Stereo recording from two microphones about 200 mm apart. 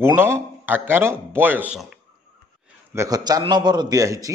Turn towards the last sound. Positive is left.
turn(degrees=-15)  # may be behind; listen again after turning